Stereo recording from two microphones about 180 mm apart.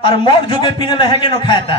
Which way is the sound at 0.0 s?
25° left (ahead or behind).